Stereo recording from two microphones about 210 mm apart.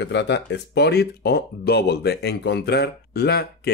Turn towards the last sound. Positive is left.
turn(degrees=50)  # may be behind; listen again after turning